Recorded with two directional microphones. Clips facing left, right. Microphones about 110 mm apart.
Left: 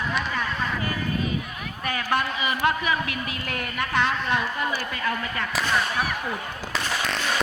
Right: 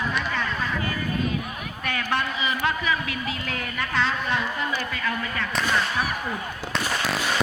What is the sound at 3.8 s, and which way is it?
Speech, 15° left (ahead or behind).